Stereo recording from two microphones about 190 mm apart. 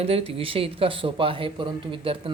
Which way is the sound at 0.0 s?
30° right (ahead or behind).